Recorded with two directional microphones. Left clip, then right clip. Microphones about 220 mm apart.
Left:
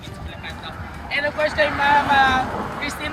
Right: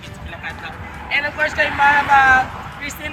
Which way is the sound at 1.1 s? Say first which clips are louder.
Right 2 dB; 10° left (ahead or behind).